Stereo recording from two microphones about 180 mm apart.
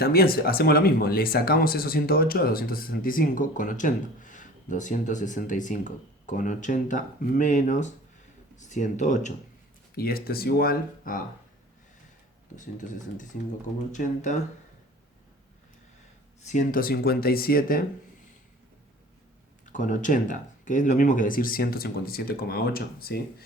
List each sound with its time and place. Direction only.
0.0 s speech: 55° left (ahead or behind)
9.9 s speech: 55° left (ahead or behind)
12.5 s speech: 45° left (ahead or behind)
16.5 s speech: 45° left (ahead or behind)
19.6 s speech: 45° left (ahead or behind)